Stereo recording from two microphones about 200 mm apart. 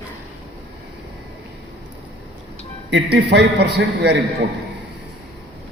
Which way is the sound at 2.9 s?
60° right (ahead or behind).